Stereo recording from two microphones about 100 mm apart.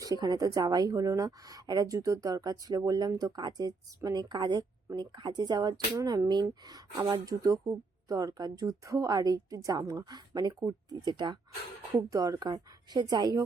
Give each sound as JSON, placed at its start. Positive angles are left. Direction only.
{"t": 0.0, "sound": "speech", "side_deg": -40}
{"t": 11.9, "sound": "speech", "side_deg": -30}